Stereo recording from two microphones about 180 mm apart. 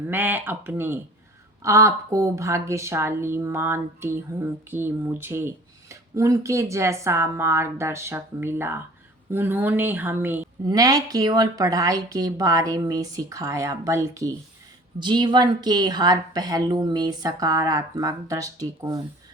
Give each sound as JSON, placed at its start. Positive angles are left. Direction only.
{"t": 0.1, "sound": "a woman's voice", "side_deg": -10}